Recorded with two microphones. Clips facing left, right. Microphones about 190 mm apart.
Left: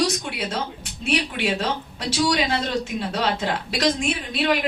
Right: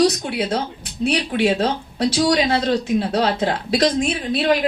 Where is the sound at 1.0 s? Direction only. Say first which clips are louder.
Right 5 dB; 45° right (ahead or behind).